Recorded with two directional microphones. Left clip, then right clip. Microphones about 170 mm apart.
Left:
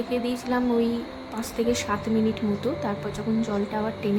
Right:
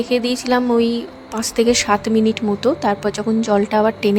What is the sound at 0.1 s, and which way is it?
A woman's voice, 60° right (ahead or behind).